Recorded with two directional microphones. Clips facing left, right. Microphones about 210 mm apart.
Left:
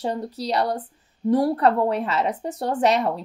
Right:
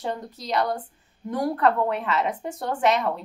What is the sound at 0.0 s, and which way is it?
Speech, 35° left (ahead or behind).